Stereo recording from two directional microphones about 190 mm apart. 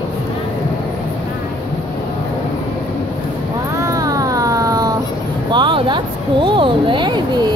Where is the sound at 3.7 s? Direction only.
20° right (ahead or behind).